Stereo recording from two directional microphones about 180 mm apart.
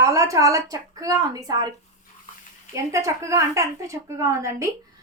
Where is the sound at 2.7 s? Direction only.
15° right (ahead or behind).